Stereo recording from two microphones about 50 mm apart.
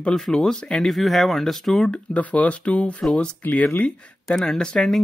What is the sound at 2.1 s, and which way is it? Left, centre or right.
Speech, left.